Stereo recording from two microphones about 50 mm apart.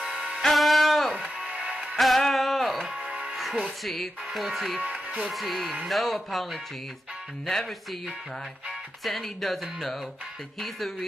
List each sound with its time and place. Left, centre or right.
0.0 s music: centre
0.4 s music: centre
1.1 s music: right
2.0 s music: centre
3.8 s speech: centre
4.8 s music: right
5.2 s speech: centre
9.0 s speech: centre